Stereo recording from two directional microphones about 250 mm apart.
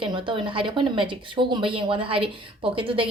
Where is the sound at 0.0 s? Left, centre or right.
Centre.